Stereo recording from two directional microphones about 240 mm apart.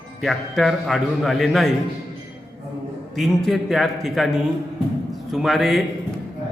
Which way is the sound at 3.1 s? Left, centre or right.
Centre.